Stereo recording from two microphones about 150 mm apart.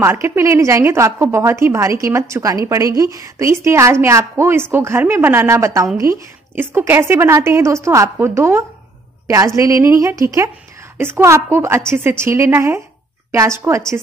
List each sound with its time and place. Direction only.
0.0 s a woman's voice: 15° right (ahead or behind)